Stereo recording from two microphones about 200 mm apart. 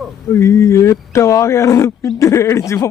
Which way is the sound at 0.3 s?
15° left (ahead or behind).